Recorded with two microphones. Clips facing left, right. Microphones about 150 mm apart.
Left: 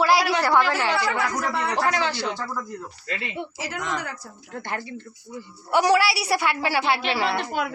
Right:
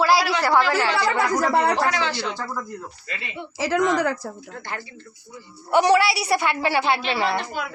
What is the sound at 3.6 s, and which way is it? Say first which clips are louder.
Speech: right 12 dB; 85° right.